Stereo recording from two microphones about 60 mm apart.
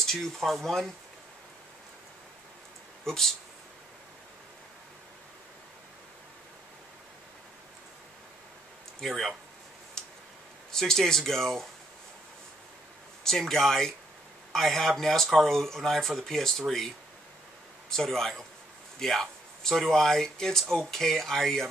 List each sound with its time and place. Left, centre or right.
0.0 s speech: centre
3.1 s speech: centre
9.0 s speech: centre
10.0 s tick-tock: centre
10.7 s speech: centre
13.2 s speech: centre